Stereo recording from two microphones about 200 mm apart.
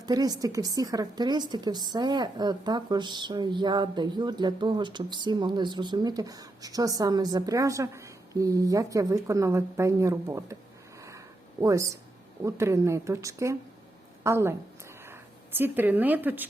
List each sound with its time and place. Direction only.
0.0 s a woman's voice: 20° right (ahead or behind)
11.6 s speech: 15° right (ahead or behind)